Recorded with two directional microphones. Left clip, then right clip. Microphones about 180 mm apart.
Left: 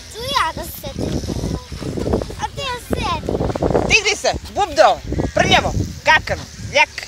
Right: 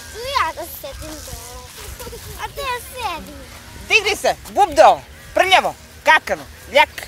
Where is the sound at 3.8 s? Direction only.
5° right (ahead or behind).